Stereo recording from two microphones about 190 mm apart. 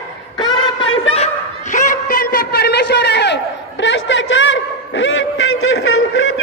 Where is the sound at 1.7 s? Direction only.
45° left (ahead or behind); by 6.2 s 90° left.